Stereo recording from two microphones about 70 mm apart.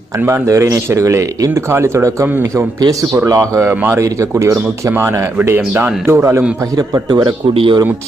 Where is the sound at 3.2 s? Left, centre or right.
Right.